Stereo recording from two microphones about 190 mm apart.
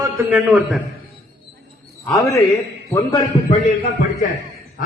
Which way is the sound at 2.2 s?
15° left (ahead or behind).